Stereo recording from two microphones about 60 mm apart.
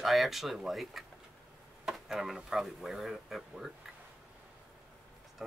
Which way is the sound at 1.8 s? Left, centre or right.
Centre.